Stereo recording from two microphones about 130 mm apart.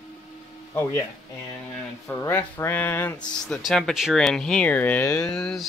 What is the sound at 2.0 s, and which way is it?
Speech, 20° left (ahead or behind).